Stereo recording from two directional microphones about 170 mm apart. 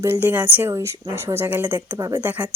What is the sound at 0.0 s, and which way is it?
Speech, 15° right (ahead or behind).